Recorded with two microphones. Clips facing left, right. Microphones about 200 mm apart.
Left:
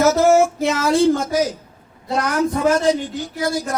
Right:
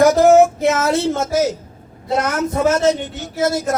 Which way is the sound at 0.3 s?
20° right (ahead or behind).